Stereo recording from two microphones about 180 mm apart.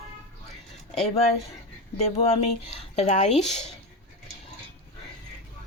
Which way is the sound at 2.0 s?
35° left (ahead or behind).